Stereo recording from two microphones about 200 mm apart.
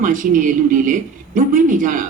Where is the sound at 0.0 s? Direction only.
40° right (ahead or behind).